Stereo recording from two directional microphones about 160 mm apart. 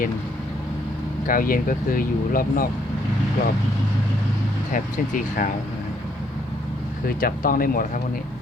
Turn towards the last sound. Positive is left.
turn(degrees=60)  # may be behind; listen again after turning